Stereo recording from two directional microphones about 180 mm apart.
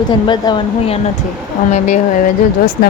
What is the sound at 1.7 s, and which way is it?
Speech, 40° left (ahead or behind).